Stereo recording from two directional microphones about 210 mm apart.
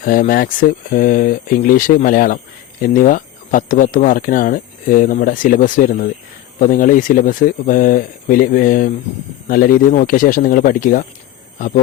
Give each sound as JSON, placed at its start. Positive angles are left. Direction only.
{"t": 0.0, "sound": "speech", "side_deg": 40}